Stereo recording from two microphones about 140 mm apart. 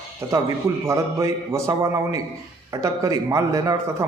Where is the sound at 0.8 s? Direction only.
20° right (ahead or behind).